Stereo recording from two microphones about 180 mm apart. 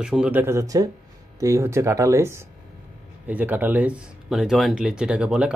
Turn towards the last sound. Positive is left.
turn(degrees=-5)  # may be behind; listen again after turning